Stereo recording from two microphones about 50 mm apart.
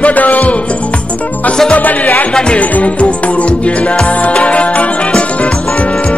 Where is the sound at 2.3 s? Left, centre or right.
Centre.